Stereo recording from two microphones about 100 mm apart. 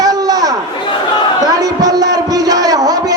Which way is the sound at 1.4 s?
40° right (ahead or behind).